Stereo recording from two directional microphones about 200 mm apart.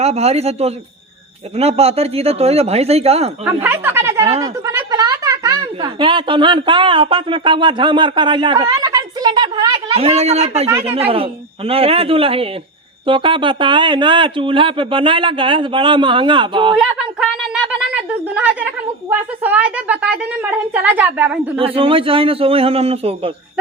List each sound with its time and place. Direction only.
0.0 s speech: 30° right (ahead or behind)
3.4 s a woman's voice: 10° right (ahead or behind)
16.7 s a woman's voice: 5° right (ahead or behind)
21.6 s speech: 25° right (ahead or behind)